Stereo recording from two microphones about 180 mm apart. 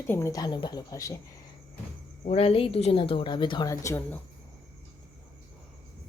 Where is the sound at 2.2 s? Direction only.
35° left (ahead or behind); by 4.2 s 15° left (ahead or behind).